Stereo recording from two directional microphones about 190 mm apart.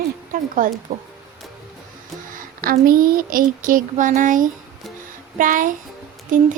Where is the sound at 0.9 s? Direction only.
45° right (ahead or behind).